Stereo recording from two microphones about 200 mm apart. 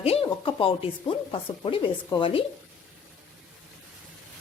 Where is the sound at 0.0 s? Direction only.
30° left (ahead or behind).